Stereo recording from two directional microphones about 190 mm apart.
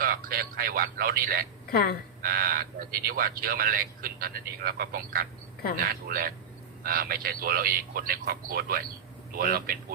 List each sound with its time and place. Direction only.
0.0 s speech: 50° right (ahead or behind)
1.6 s speech: 50° left (ahead or behind)
2.2 s speech: 50° right (ahead or behind)